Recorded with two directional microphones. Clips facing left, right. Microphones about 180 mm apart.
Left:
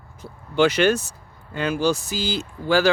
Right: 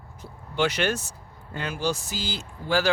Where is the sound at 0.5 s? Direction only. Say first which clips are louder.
Left 7 dB; 90° left.